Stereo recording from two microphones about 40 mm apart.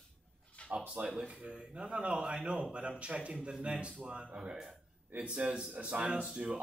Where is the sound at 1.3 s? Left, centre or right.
Right.